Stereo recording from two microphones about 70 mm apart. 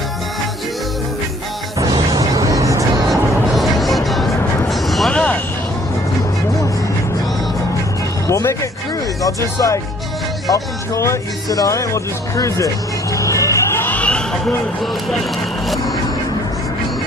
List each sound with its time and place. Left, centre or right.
1.9 s music: right
3.1 s music: centre
4.6 s a sound: centre
5.1 s a sound: centre
8.3 s music: left
9.2 s speech: left
11.4 s music: left
13.9 s a sound: centre
14.8 s speech: centre